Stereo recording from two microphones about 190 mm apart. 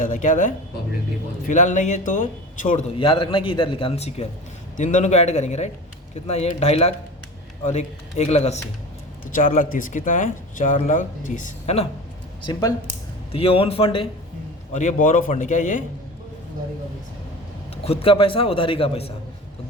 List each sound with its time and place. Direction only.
0.0 s a man's voice: 40° left (ahead or behind)
3.0 s a man's voice: 25° left (ahead or behind)
12.5 s a man's voice: 20° left (ahead or behind)
13.3 s a man's voice: 30° left (ahead or behind)
14.7 s a man's voice: 40° left (ahead or behind)
17.8 s a man's voice: 30° left (ahead or behind)